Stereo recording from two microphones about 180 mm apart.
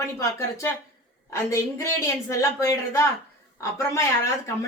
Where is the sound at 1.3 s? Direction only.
15° left (ahead or behind).